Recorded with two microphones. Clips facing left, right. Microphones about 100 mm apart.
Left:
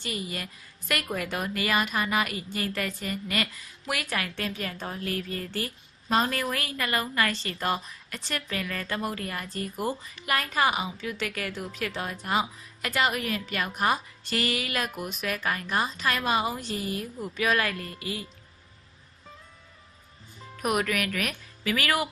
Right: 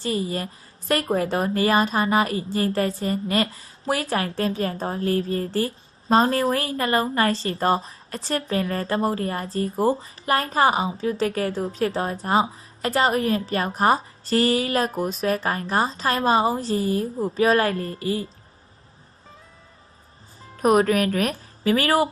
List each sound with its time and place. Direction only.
0.0 s a woman's voice: 35° right (ahead or behind)
20.5 s speech: 35° right (ahead or behind)